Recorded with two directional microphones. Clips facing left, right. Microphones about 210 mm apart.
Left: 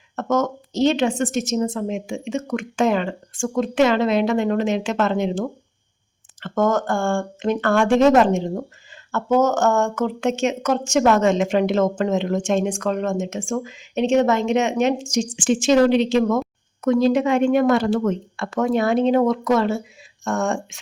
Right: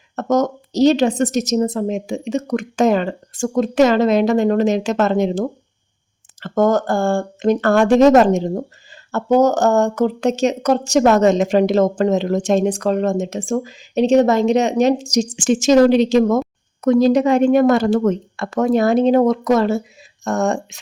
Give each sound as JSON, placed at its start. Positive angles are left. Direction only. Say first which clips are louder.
{"t": 0.2, "sound": "a woman's voice", "louder": "right 4 dB", "side_deg": -40}